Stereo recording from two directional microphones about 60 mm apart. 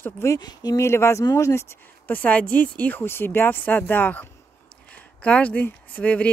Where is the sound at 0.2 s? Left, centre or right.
Left.